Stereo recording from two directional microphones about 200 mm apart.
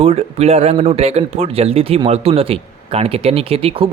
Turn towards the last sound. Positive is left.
turn(degrees=-30)  # may be behind; listen again after turning